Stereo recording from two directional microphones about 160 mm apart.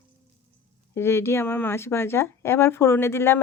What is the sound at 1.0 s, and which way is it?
Speech, 15° left (ahead or behind).